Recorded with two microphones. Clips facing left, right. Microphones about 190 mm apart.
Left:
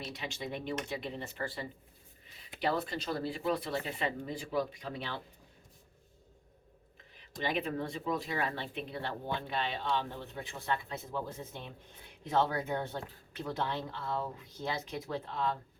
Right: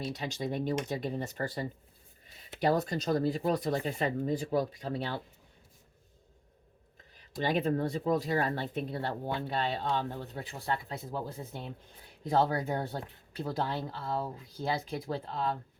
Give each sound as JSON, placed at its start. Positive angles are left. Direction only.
{"t": 0.1, "sound": "speech", "side_deg": -40}
{"t": 7.2, "sound": "speech", "side_deg": -40}